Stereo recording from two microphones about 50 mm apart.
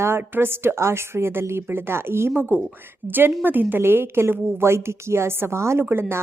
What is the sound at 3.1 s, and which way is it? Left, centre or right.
A woman's voice, right.